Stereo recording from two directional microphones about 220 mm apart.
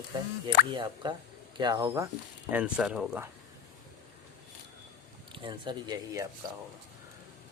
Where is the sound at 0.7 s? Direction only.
20° right (ahead or behind).